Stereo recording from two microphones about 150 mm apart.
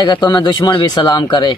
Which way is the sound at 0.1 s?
30° left (ahead or behind).